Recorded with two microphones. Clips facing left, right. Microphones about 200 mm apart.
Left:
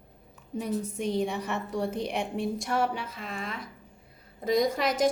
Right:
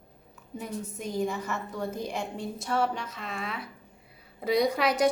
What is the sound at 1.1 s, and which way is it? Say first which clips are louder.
Speech: right 1 dB; 30° left (ahead or behind).